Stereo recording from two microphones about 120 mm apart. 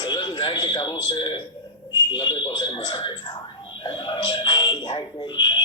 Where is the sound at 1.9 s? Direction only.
40° left (ahead or behind).